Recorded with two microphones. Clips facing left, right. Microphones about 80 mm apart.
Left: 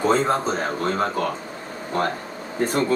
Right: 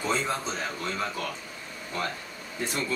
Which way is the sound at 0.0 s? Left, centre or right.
Left.